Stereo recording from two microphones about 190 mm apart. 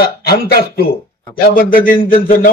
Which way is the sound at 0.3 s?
55° left (ahead or behind).